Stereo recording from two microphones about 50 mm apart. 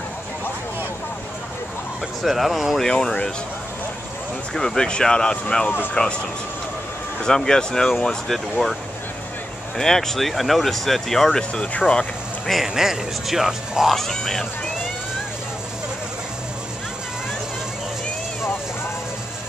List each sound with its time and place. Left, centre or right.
2.2 s speech: centre
2.9 s speech: centre
4.6 s speech: centre
7.2 s speech: centre
9.8 s speech: centre
11.5 s speech: left
12.4 s speech: centre
13.9 s speech: centre